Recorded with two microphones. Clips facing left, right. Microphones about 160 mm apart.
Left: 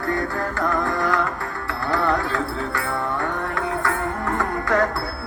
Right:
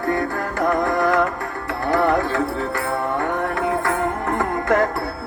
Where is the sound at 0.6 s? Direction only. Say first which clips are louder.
Right 5 dB; 20° right (ahead or behind).